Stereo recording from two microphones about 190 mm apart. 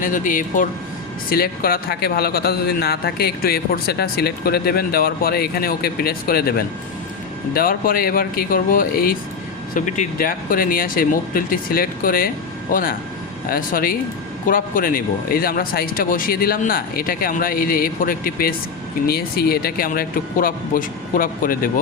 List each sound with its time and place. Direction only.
0.0 s a man's voice: 45° left (ahead or behind)